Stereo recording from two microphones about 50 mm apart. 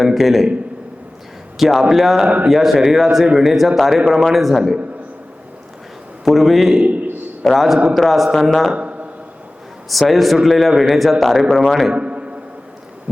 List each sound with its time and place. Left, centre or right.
0.0 s a man's voice: centre
1.5 s a man's voice: centre
2.2 s speech: right
2.5 s a man's voice: centre
6.2 s a man's voice: centre
6.8 s a man's voice: right
7.4 s a man's voice: centre
8.7 s a sound: right
9.9 s a man's voice: centre
11.9 s a sound: right